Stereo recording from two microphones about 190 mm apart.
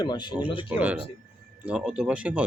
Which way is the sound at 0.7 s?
5° right (ahead or behind).